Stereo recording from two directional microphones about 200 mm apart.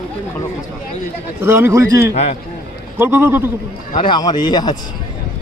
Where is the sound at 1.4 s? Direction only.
10° right (ahead or behind).